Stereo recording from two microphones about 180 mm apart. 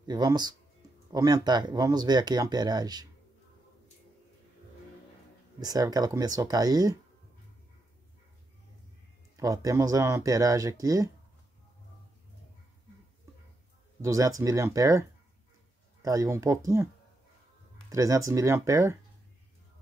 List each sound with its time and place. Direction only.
0.0 s speech: 20° right (ahead or behind)
5.6 s speech: 20° right (ahead or behind)
9.4 s speech: 20° right (ahead or behind)
14.0 s speech: 15° right (ahead or behind)